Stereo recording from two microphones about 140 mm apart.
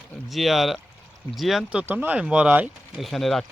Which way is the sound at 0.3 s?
Centre (ahead or behind).